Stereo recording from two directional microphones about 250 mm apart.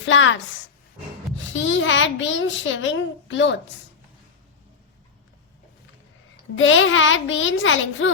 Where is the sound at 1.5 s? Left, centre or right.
Left.